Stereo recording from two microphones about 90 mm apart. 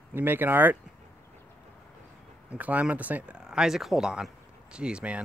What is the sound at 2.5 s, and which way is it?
Speech, 15° right (ahead or behind).